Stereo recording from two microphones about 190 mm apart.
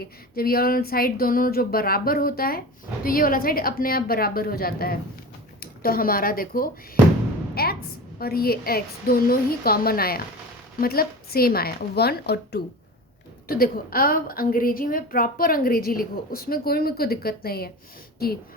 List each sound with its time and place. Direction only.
0.0 s a woman's voice: 50° left (ahead or behind)